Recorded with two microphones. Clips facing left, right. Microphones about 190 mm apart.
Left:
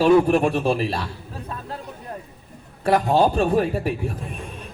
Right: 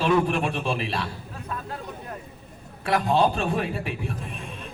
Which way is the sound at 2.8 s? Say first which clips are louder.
Left 4 dB; 40° left (ahead or behind).